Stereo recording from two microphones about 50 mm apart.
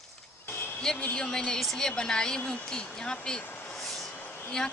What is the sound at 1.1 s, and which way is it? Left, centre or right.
Speech, centre.